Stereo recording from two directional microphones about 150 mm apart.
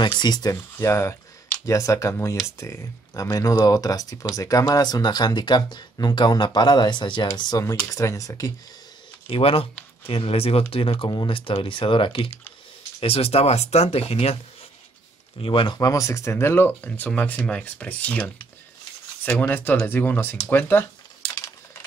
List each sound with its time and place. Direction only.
0.0 s speech: 30° left (ahead or behind)
9.3 s speech: 40° left (ahead or behind); by 20.8 s 15° left (ahead or behind)